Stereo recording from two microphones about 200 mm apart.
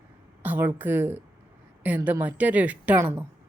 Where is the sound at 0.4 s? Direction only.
10° right (ahead or behind).